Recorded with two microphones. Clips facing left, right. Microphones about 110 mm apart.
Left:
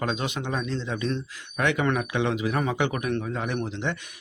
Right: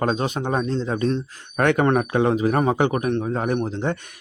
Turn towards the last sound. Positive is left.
turn(degrees=-40)  # may be behind; listen again after turning